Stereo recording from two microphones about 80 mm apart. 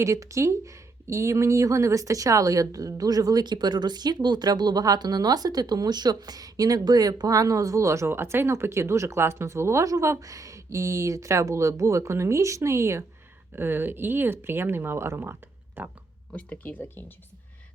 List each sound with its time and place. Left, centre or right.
0.0 s speech: right
16.3 s speech: centre